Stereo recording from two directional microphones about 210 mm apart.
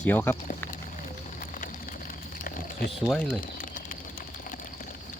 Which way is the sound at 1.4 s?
40° left (ahead or behind).